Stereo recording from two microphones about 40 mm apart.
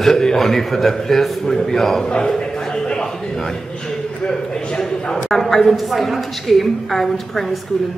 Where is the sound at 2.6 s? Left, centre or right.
Centre.